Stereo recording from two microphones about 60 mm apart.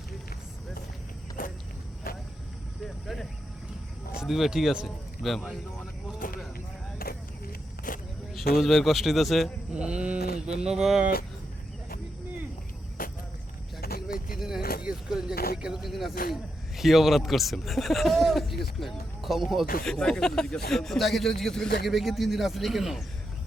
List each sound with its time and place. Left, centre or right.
2.8 s a sound: centre
4.1 s speech: centre
5.2 s speech: centre
8.3 s speech: centre
9.7 s mantra: centre
14.3 s mantra: centre
15.9 s speech: centre
19.8 s speech: centre
21.8 s speech: centre